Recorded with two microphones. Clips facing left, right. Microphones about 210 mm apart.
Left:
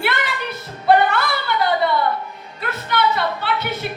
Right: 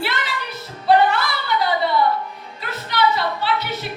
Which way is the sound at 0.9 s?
55° left (ahead or behind).